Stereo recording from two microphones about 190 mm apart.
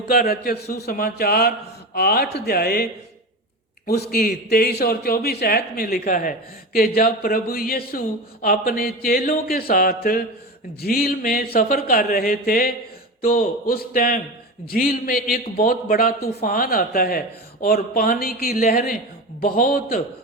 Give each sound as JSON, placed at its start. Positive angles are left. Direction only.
{"t": 0.1, "sound": "a man's voice", "side_deg": 50}
{"t": 3.8, "sound": "speech", "side_deg": 55}